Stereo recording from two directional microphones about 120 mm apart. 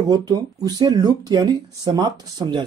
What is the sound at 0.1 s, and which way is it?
Speech, 35° right (ahead or behind).